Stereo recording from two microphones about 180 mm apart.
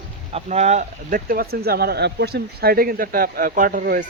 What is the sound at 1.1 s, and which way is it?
Speech, 55° right (ahead or behind).